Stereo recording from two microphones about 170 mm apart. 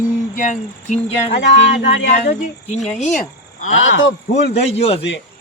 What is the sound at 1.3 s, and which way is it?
Speech, 90° left.